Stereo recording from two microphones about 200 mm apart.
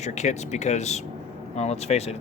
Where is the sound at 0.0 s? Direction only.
35° left (ahead or behind).